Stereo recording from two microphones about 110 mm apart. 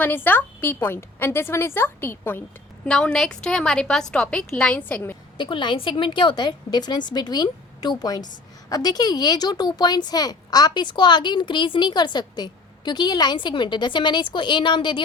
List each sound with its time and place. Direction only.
0.0 s a woman's voice: 15° left (ahead or behind)
2.8 s a woman's voice: 5° left (ahead or behind)
5.4 s a woman's voice: 45° left (ahead or behind)